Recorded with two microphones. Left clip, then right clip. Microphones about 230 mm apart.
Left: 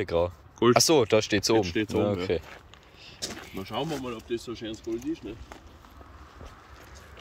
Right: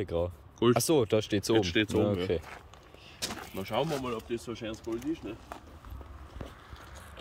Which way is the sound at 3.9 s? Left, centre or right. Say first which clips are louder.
Even; centre.